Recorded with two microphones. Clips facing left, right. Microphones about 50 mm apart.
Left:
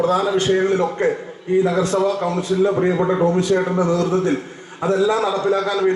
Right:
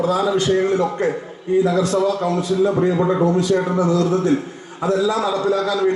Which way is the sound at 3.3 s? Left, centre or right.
Left.